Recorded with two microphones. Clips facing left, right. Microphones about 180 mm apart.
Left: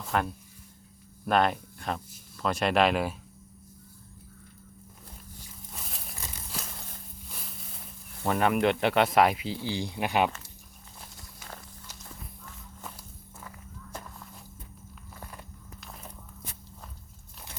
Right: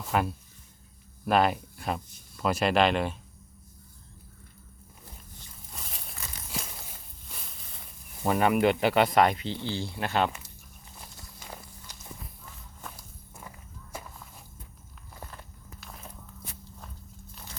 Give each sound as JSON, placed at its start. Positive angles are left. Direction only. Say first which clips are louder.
{"t": 0.0, "sound": "speech", "louder": "right 1 dB", "side_deg": -5}
{"t": 5.4, "sound": "a sound", "louder": "left 1 dB", "side_deg": 0}
{"t": 8.2, "sound": "speech", "louder": "right 1 dB", "side_deg": -5}
{"t": 11.0, "sound": "walk", "louder": "right 1 dB", "side_deg": -5}
{"t": 15.8, "sound": "walk", "louder": "even", "side_deg": 0}